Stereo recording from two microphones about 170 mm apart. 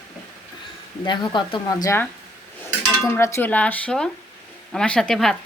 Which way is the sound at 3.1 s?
15° left (ahead or behind).